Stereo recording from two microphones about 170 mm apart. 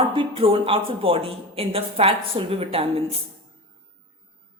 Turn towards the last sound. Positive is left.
turn(degrees=-35)  # may be behind; listen again after turning